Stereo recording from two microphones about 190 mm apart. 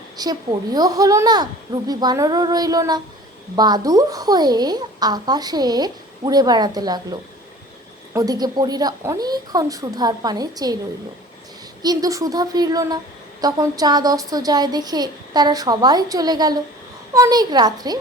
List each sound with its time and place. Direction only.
0.2 s a woman's voice: 20° right (ahead or behind)
11.8 s a woman's voice: 20° right (ahead or behind)